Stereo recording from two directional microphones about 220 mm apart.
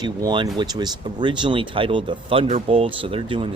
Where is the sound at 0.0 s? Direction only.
20° right (ahead or behind).